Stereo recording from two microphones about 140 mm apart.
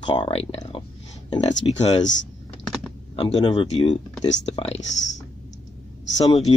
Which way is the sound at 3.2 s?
40° left (ahead or behind).